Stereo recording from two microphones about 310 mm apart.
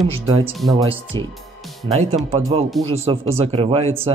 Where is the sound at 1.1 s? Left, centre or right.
Centre.